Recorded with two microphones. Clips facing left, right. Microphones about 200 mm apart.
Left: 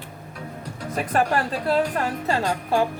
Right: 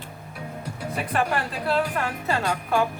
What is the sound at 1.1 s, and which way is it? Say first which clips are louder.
Speech: left 4 dB; 40° left (ahead or behind).